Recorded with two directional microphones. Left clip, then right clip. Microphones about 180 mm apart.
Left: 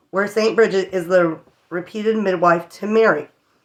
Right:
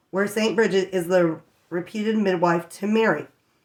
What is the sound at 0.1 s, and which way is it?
Speech, 20° right (ahead or behind).